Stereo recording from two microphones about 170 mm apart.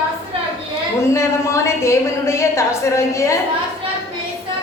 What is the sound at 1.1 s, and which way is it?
A woman's voice, 15° left (ahead or behind).